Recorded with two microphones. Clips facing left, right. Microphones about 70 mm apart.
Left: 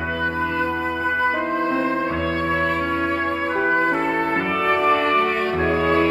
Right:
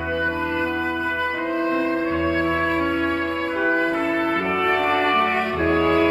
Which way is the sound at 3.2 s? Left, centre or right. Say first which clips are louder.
Left 1 dB; left.